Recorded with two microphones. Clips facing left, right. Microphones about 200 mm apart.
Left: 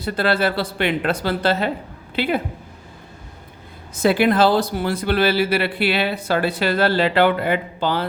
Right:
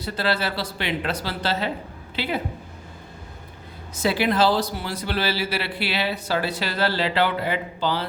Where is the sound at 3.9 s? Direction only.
55° left (ahead or behind).